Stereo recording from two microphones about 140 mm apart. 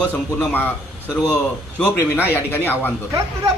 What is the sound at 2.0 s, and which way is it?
Speech, 15° left (ahead or behind).